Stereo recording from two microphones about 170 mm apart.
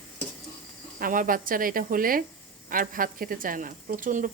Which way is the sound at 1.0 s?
55° right (ahead or behind).